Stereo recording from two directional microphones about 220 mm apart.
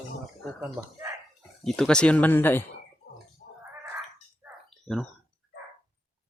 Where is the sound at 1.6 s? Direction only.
5° left (ahead or behind).